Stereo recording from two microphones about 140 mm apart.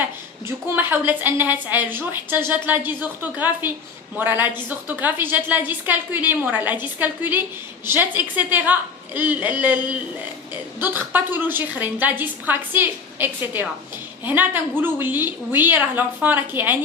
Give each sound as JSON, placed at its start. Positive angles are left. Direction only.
{"t": 0.4, "sound": "a woman's voice", "side_deg": -15}